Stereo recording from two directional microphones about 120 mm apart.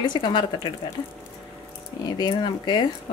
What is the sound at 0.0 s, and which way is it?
Speech, 40° left (ahead or behind).